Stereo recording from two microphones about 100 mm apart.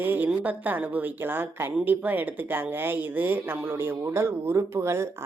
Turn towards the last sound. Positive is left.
turn(degrees=-25)  # may be behind; listen again after turning